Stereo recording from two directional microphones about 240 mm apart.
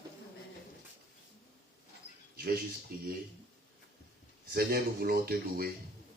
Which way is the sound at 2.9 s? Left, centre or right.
Right.